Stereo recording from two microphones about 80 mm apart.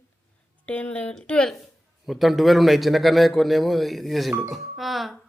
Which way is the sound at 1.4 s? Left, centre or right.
Centre.